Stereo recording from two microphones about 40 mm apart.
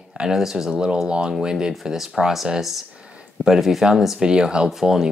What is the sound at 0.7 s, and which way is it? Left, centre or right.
Speech, right.